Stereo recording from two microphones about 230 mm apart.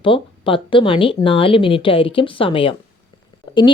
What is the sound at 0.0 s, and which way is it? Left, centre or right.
Speech, left.